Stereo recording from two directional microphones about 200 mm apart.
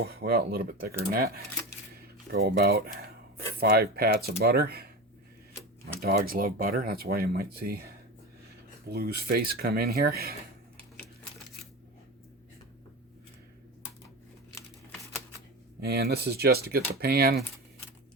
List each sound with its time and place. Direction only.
0.0 s speech: 50° right (ahead or behind)
2.3 s speech: 50° right (ahead or behind)
6.0 s speech: 50° right (ahead or behind)
8.9 s speech: 50° right (ahead or behind)
15.8 s speech: 55° right (ahead or behind)